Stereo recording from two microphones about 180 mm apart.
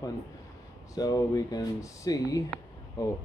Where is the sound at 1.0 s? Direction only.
20° left (ahead or behind).